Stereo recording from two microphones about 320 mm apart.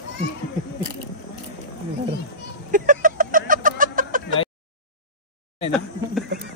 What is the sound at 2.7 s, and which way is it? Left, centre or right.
Chicken, right.